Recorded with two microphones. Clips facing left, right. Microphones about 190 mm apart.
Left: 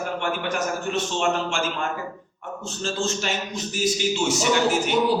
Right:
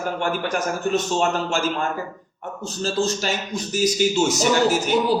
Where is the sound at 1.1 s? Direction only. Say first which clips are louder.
Right 2 dB; 40° right (ahead or behind).